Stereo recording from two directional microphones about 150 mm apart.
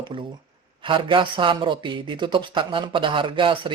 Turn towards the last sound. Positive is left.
turn(degrees=-35)  # may be behind; listen again after turning